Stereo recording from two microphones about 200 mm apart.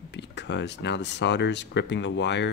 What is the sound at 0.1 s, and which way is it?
Speech, 60° left (ahead or behind).